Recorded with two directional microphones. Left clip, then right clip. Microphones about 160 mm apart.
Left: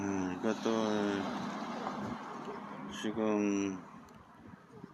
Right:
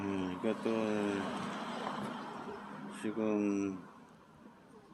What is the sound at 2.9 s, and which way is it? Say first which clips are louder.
Speech: left 2 dB; 15° right (ahead or behind).